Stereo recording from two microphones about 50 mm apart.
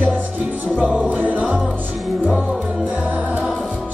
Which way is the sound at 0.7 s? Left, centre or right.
Right.